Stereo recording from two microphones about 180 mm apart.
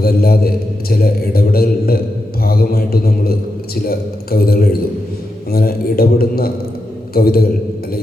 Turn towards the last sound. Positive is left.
turn(degrees=55)  # may be behind; listen again after turning